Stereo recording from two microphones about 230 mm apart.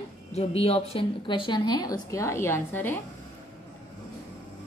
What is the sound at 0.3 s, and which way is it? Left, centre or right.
A woman's voice, left.